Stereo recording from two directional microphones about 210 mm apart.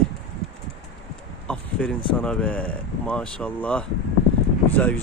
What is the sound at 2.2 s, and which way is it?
Speech, 5° left (ahead or behind).